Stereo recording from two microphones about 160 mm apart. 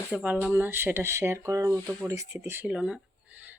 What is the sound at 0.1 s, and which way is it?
Speech, 10° right (ahead or behind).